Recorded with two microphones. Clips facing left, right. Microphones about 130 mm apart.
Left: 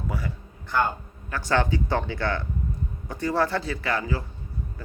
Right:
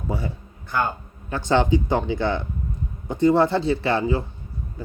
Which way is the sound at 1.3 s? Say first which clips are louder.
Right 5 dB; 20° right (ahead or behind).